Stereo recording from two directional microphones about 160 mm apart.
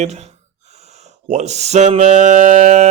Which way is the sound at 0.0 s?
45° right (ahead or behind).